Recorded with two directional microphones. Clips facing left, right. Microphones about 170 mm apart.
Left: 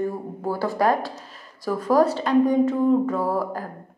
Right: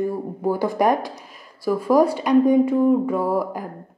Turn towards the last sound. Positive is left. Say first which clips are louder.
# right 2 dB
turn(degrees=-15)  # may be behind; listen again after turning